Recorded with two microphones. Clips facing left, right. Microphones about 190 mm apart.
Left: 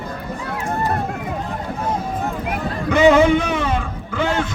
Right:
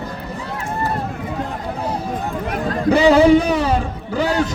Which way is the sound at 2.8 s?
35° right (ahead or behind).